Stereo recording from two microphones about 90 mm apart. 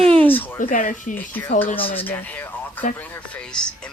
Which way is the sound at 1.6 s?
20° left (ahead or behind).